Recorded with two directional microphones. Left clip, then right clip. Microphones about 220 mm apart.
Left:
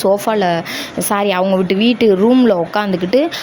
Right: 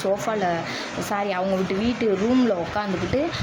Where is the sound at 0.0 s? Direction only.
40° left (ahead or behind).